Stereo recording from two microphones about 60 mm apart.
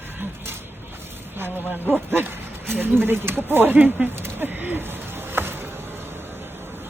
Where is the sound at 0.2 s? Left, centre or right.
Right.